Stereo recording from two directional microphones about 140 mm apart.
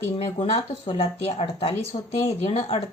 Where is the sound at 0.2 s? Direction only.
40° left (ahead or behind).